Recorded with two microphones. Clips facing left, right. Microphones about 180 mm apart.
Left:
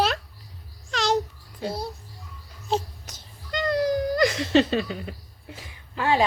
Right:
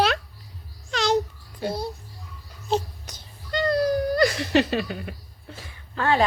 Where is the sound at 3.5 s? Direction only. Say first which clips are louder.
Right 1 dB; 15° left (ahead or behind).